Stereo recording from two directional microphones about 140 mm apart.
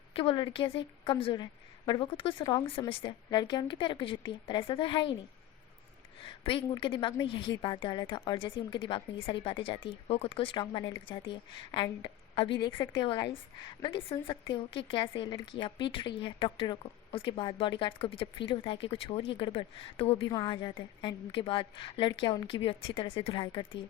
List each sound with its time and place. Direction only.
0.1 s a woman's voice: 40° left (ahead or behind)
6.2 s a woman's voice: 40° left (ahead or behind)